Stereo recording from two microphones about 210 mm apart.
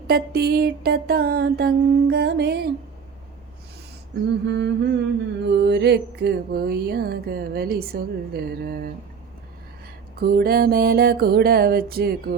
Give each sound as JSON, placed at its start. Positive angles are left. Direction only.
{"t": 0.1, "sound": "music", "side_deg": -50}
{"t": 4.4, "sound": "a sound", "side_deg": -55}
{"t": 5.5, "sound": "music", "side_deg": -55}
{"t": 10.2, "sound": "music", "side_deg": -45}